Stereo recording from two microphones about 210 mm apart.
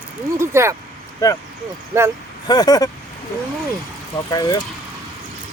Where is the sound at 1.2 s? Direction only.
15° left (ahead or behind).